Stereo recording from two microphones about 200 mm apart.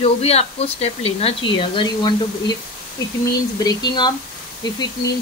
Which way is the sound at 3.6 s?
20° left (ahead or behind).